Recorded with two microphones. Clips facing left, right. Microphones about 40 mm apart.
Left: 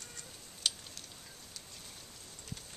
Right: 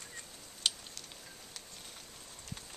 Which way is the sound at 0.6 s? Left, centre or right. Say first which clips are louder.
Right 1 dB; centre.